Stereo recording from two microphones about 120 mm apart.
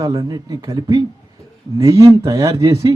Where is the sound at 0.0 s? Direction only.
30° right (ahead or behind).